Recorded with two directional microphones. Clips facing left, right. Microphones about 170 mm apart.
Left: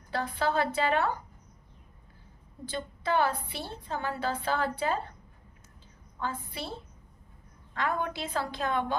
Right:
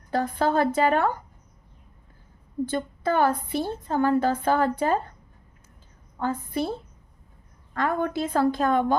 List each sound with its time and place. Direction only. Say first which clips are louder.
0.1 s a woman's voice: right 6 dB; 45° right (ahead or behind)
2.6 s a woman's voice: right 4 dB; 50° right (ahead or behind)
6.1 s a woman's voice: right 9 dB; 50° right (ahead or behind)